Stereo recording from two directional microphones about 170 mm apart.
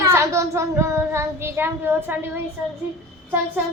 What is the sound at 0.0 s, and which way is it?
Child singing, 15° right (ahead or behind).